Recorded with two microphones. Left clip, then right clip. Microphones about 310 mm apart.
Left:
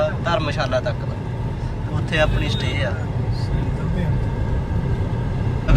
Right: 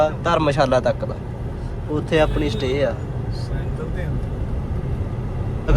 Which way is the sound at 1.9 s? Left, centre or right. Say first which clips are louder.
Right 2 dB; centre.